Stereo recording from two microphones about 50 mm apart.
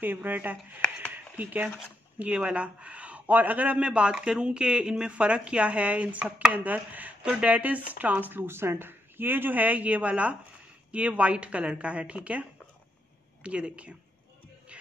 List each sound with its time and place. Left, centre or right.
0.0 s speech: right
1.1 s a sound: right
2.1 s speech: right
7.2 s speech: right
7.5 s speech: right